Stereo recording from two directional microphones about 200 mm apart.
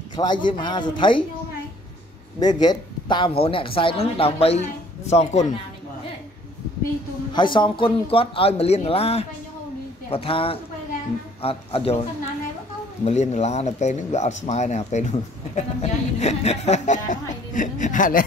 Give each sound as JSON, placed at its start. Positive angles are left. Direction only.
{"t": 0.1, "sound": "a man's voice", "side_deg": 20}
{"t": 2.4, "sound": "speech", "side_deg": 20}
{"t": 7.3, "sound": "speech", "side_deg": 25}
{"t": 13.0, "sound": "speech", "side_deg": 35}